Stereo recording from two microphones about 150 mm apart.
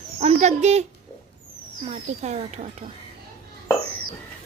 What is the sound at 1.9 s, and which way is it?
Speech, 45° right (ahead or behind).